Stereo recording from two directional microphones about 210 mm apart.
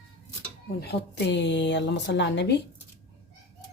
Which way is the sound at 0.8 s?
50° left (ahead or behind).